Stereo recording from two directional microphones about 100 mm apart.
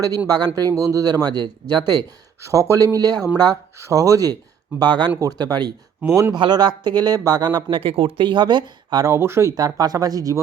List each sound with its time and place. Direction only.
0.3 s speech: 45° right (ahead or behind)
2.4 s speech: 30° right (ahead or behind)
3.8 s speech: 30° right (ahead or behind)
4.8 s speech: 50° right (ahead or behind)
7.8 s speech: 65° right (ahead or behind)
8.2 s speech: 50° right (ahead or behind)
9.0 s speech: 25° right (ahead or behind)